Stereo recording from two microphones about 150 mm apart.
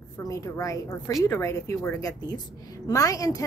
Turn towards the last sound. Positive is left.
turn(degrees=20)  # may be behind; listen again after turning